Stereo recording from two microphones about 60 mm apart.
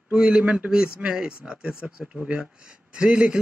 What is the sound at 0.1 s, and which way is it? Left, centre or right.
A man's voice, centre.